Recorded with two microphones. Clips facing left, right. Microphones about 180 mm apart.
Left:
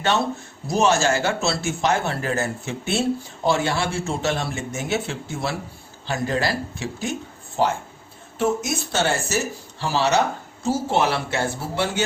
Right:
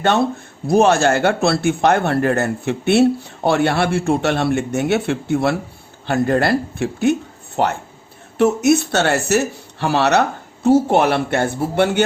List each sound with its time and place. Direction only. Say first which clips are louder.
0.7 s a man's voice: right 6 dB; 55° right (ahead or behind)